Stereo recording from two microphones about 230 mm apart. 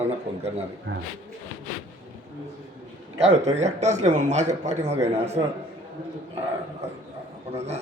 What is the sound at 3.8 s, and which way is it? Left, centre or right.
Speech, right.